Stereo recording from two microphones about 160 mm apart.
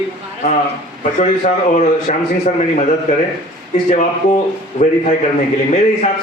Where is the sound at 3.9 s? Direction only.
50° left (ahead or behind).